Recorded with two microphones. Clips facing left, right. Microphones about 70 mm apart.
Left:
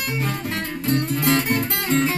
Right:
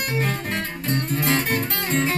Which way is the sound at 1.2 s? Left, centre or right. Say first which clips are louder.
Left 1 dB; centre.